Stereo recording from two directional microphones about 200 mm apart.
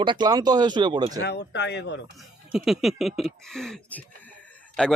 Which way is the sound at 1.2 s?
60° left (ahead or behind).